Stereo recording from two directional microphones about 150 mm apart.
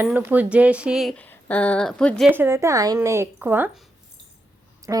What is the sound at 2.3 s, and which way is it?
A woman's voice, 15° right (ahead or behind).